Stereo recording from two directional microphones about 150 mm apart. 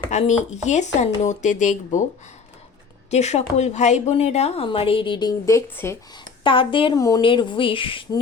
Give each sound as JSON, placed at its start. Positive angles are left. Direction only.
{"t": 0.1, "sound": "speech", "side_deg": 50}
{"t": 3.1, "sound": "a woman's voice", "side_deg": 45}
{"t": 6.4, "sound": "a woman's voice", "side_deg": 35}
{"t": 6.9, "sound": "speech", "side_deg": 25}
{"t": 7.2, "sound": "a woman's voice", "side_deg": 35}